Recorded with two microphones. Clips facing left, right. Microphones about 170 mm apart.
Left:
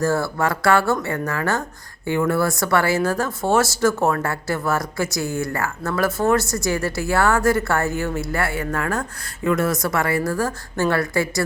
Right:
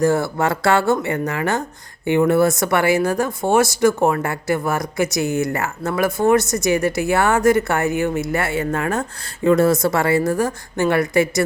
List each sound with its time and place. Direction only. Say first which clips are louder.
0.0 s speech: right 3 dB; 20° right (ahead or behind)